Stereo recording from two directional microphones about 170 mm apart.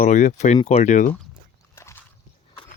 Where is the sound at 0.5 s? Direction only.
30° left (ahead or behind).